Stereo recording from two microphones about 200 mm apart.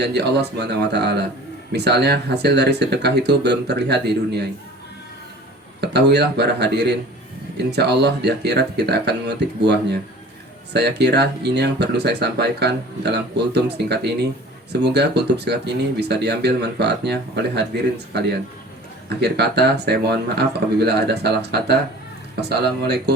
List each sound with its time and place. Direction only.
0.0 s speech: 55° right (ahead or behind)
5.8 s speech: 55° right (ahead or behind)